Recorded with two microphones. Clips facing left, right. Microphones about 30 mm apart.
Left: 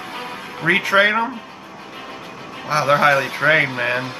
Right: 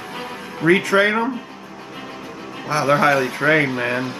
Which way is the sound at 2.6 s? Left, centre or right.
Centre.